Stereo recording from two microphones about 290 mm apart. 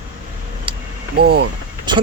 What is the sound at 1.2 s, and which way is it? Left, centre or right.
Speech, right.